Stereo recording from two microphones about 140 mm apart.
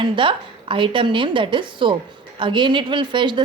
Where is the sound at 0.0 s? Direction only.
35° right (ahead or behind).